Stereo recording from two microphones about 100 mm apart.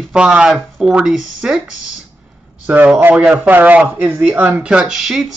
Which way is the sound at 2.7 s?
20° right (ahead or behind).